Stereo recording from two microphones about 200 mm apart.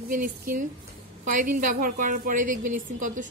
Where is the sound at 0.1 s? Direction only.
45° right (ahead or behind).